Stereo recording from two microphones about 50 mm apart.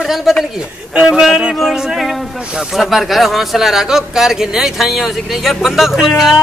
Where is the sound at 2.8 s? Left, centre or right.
Centre.